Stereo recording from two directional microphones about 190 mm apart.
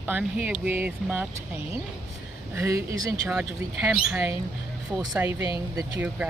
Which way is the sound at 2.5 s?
15° right (ahead or behind).